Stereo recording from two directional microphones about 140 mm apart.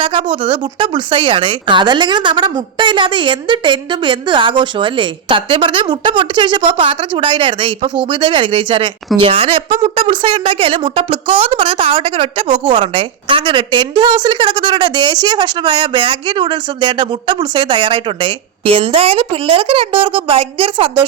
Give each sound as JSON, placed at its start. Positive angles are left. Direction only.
{"t": 0.0, "sound": "a woman's voice", "side_deg": -35}